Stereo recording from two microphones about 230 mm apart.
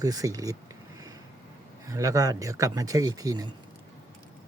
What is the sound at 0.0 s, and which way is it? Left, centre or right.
Speech, centre.